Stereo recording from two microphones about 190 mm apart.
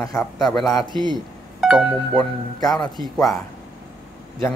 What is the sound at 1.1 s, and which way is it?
Speech, centre (ahead or behind).